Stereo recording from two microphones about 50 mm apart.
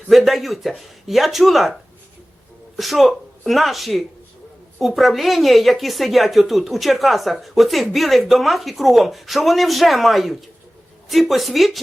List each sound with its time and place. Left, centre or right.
0.2 s a woman's voice: centre
2.7 s a woman's voice: centre